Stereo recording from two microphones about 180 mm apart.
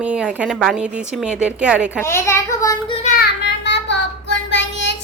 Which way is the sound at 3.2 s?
75° left (ahead or behind).